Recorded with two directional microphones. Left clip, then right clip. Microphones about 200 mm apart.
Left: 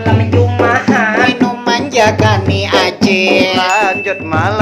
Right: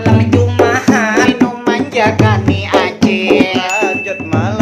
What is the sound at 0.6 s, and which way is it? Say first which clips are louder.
Music: left 1 dB; 40° right (ahead or behind).